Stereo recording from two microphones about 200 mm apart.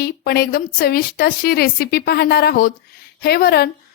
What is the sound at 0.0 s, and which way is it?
A woman's voice, 50° left (ahead or behind).